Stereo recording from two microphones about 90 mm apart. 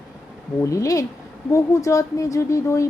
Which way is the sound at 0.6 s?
35° left (ahead or behind).